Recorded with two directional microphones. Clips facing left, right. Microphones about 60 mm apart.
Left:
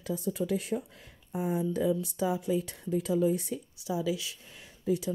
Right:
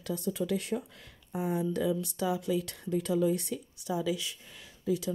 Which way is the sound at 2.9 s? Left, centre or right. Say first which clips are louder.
Left 1 dB; centre.